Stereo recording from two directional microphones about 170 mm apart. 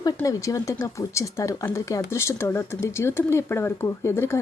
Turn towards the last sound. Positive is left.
turn(degrees=15)  # may be behind; listen again after turning